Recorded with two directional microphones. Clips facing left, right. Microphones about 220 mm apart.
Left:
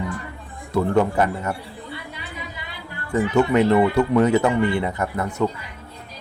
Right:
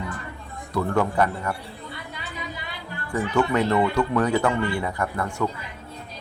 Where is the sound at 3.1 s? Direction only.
20° left (ahead or behind).